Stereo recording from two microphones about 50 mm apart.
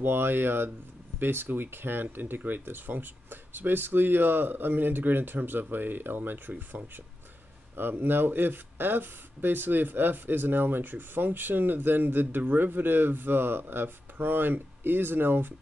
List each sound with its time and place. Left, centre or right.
0.0 s speech: right